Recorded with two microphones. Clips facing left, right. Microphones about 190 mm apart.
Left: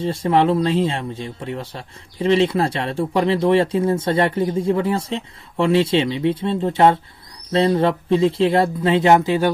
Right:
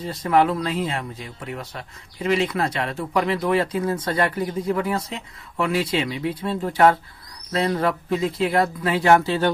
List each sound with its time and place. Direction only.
0.0 s speech: 25° left (ahead or behind)